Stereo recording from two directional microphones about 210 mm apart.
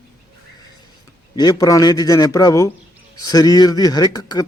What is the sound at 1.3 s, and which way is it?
Speech, 20° left (ahead or behind).